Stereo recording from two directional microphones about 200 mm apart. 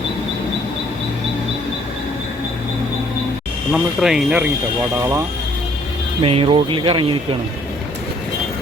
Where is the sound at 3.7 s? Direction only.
Centre (ahead or behind).